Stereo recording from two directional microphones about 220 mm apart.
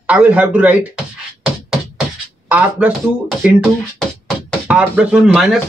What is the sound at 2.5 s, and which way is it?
Speech, 5° right (ahead or behind).